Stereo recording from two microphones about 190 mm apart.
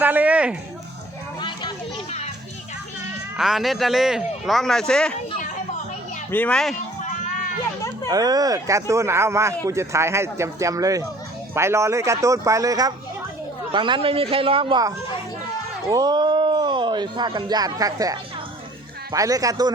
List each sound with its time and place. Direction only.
0.0 s speech: 10° right (ahead or behind)
1.4 s children playing: 25° left (ahead or behind)
3.3 s speech: centre (ahead or behind)
6.3 s speech: 5° left (ahead or behind)
8.0 s speech: 20° right (ahead or behind)